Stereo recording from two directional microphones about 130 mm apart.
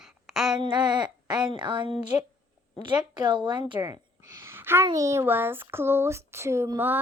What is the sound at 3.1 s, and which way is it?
Speech, 35° right (ahead or behind).